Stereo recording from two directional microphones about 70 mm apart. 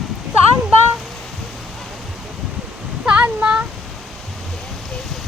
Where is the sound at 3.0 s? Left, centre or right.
Centre.